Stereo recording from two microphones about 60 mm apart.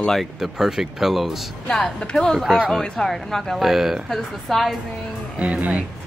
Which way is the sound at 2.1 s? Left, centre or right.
Centre.